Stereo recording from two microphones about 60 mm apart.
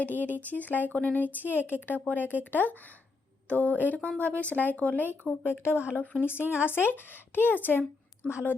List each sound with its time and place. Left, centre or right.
0.0 s speech: left
3.5 s speech: left